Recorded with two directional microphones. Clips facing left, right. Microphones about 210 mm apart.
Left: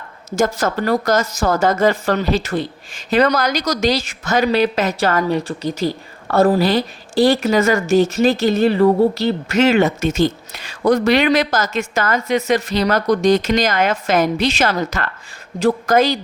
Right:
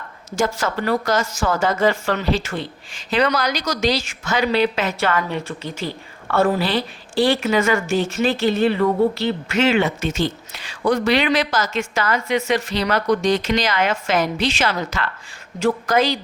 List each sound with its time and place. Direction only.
0.3 s speech: 40° left (ahead or behind)